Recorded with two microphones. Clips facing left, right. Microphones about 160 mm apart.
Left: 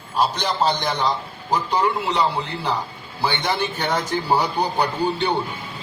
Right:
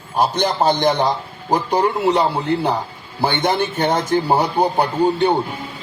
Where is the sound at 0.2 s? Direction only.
50° right (ahead or behind).